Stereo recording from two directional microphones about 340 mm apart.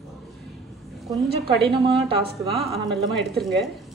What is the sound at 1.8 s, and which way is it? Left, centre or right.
Speech, right.